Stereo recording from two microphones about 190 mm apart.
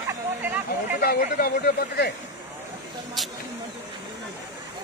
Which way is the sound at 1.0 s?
50° left (ahead or behind).